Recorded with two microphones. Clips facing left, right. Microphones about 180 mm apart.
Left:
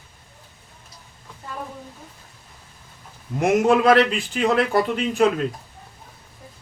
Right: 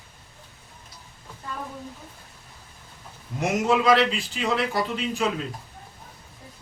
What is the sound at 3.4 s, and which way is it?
A man's voice, 55° left (ahead or behind).